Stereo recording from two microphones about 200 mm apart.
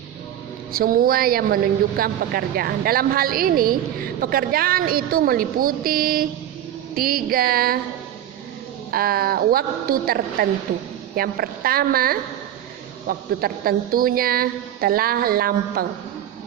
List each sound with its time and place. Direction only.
0.7 s a woman's voice: 45° right (ahead or behind)
8.9 s a woman's voice: 50° right (ahead or behind)